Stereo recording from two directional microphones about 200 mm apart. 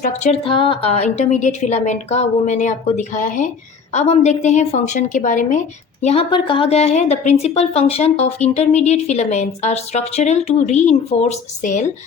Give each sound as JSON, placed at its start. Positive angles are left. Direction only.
{"t": 0.0, "sound": "speech", "side_deg": 35}